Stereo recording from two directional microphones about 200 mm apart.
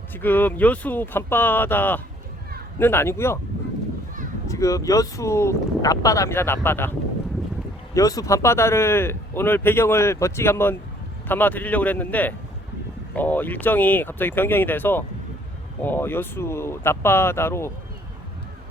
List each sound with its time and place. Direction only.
0.1 s speech: 10° left (ahead or behind)
4.4 s speech: 15° left (ahead or behind)
7.9 s speech: 15° left (ahead or behind)